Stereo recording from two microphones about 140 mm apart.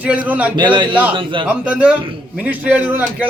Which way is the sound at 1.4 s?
10° right (ahead or behind).